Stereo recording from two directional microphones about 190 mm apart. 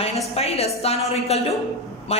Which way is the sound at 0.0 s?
35° left (ahead or behind).